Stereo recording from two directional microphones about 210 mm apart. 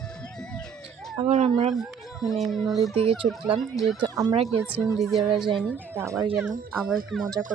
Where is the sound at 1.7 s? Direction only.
Centre (ahead or behind).